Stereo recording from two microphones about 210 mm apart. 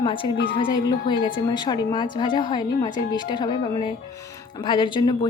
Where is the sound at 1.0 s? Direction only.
20° left (ahead or behind).